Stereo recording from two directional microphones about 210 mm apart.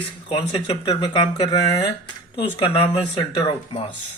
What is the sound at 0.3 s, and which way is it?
Speech, 25° left (ahead or behind).